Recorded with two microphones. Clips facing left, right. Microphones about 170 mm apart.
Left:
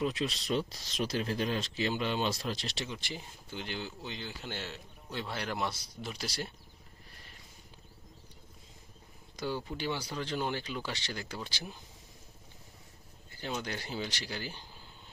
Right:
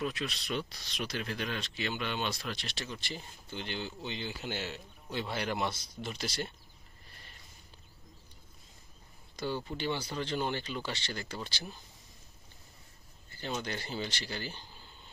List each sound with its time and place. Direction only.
0.0 s speech: 25° left (ahead or behind)
2.8 s speech: 15° left (ahead or behind)
9.4 s speech: 10° left (ahead or behind)
13.6 s speech: 10° left (ahead or behind)